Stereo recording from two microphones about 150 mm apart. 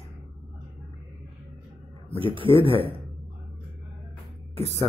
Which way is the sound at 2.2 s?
35° right (ahead or behind).